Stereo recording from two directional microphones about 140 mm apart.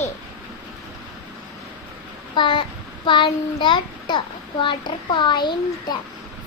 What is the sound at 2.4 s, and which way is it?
A child's voice, 35° left (ahead or behind).